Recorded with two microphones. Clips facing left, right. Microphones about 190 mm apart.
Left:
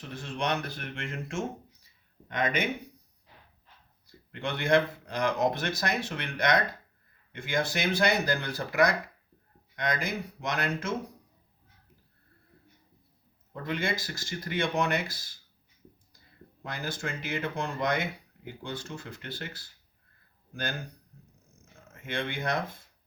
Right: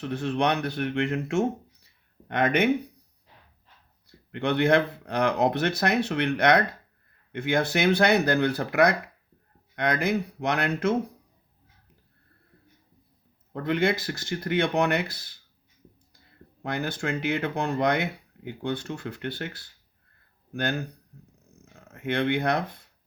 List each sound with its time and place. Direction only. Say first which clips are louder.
0.0 s speech: right 8 dB; 65° right (ahead or behind)
4.3 s speech: right 5 dB; 60° right (ahead or behind)
13.5 s speech: right 7 dB; 60° right (ahead or behind)
16.6 s speech: right 7 dB; 60° right (ahead or behind)
21.9 s speech: right 9 dB; 60° right (ahead or behind)